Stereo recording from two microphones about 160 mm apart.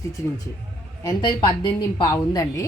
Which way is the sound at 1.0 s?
25° left (ahead or behind).